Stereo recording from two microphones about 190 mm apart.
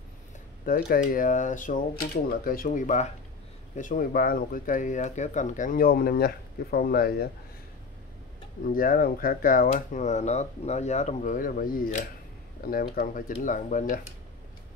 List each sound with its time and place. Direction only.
0.7 s speech: 50° left (ahead or behind)
8.7 s speech: 45° left (ahead or behind)